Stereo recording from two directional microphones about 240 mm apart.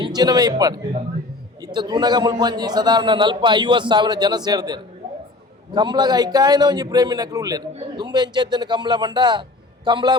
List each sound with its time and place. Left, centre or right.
0.0 s a man's voice: centre